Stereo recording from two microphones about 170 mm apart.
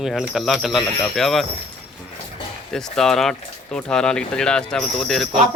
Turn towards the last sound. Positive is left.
turn(degrees=0)  # may be behind; listen again after turning